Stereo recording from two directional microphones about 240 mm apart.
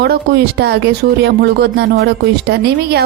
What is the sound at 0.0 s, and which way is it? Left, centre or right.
A woman's voice, right.